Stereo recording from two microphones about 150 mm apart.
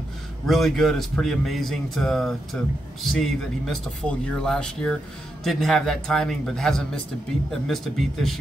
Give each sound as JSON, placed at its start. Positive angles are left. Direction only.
{"t": 0.5, "sound": "speech", "side_deg": 0}